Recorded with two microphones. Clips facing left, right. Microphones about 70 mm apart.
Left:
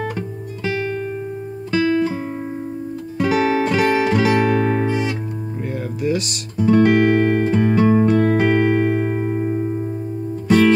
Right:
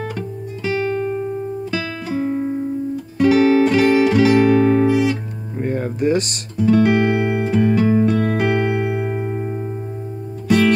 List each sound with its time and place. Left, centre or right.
2.0 s music: centre
5.7 s music: right
6.8 s music: centre